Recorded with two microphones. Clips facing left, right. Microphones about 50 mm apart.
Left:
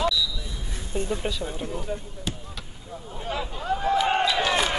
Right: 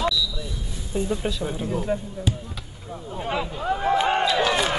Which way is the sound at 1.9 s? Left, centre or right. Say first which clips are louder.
Right 8 dB; right.